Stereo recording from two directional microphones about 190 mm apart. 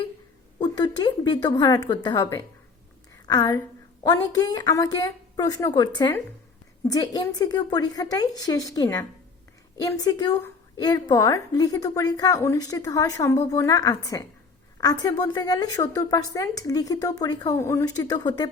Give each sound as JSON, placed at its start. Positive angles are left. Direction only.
{"t": 0.6, "sound": "a woman's voice", "side_deg": 20}